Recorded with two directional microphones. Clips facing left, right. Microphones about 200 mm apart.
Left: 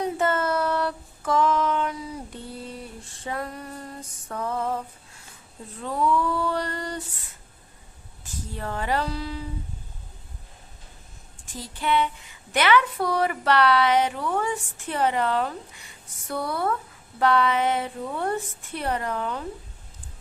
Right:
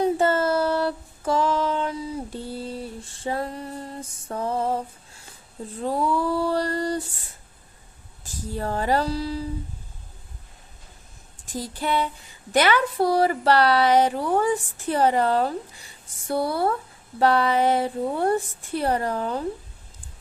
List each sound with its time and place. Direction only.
0.0 s female singing: 30° right (ahead or behind)
5.8 s a woman's voice: 35° right (ahead or behind)
8.2 s a woman's voice: 35° right (ahead or behind)
11.5 s a woman's voice: 40° right (ahead or behind)